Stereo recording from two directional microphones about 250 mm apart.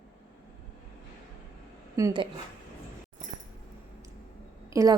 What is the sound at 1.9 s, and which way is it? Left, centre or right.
Speech, centre.